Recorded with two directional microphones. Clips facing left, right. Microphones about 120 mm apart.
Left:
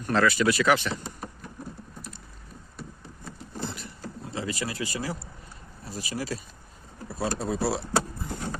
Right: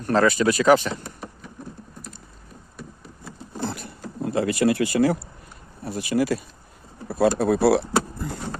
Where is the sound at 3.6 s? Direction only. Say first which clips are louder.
Right 6 dB; 60° right (ahead or behind).